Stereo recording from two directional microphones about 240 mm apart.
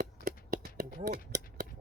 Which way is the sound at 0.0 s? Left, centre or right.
Right.